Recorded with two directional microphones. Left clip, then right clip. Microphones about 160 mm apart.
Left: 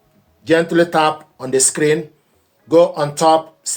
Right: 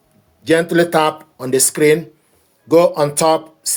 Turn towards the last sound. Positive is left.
turn(degrees=-55)  # may be behind; listen again after turning